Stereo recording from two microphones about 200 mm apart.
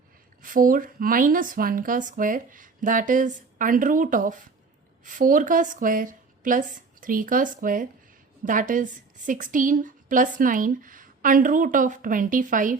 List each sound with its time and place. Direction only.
0.4 s a woman's voice: 45° right (ahead or behind)